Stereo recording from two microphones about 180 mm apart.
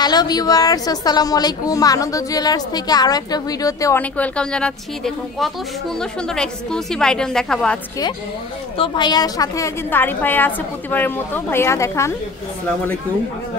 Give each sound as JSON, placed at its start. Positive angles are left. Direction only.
{"t": 0.0, "sound": "a woman's voice", "side_deg": 25}
{"t": 8.7, "sound": "a woman's voice", "side_deg": 25}